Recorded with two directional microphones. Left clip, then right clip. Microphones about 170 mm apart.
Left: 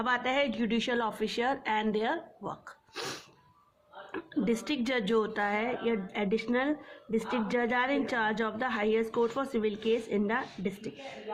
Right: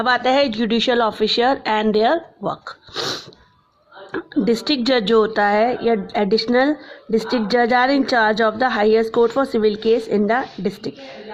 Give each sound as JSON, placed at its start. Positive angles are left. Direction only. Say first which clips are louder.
{"t": 0.0, "sound": "a woman's voice", "louder": "right 13 dB", "side_deg": -45}